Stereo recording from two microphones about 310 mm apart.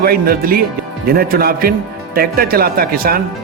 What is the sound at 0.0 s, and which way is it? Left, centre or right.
Speech, right.